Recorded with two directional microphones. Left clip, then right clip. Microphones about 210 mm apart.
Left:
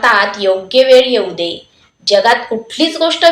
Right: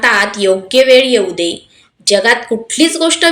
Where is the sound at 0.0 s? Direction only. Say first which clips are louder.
Even; 55° right (ahead or behind).